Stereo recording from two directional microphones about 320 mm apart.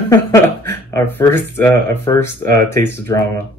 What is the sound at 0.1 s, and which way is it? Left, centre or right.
Speech, centre.